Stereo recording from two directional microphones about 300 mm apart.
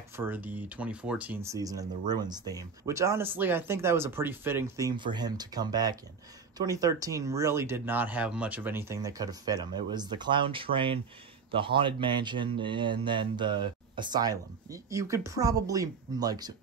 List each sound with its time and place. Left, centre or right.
0.1 s speech: centre